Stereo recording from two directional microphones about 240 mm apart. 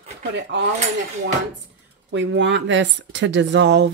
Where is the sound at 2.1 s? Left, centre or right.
Right.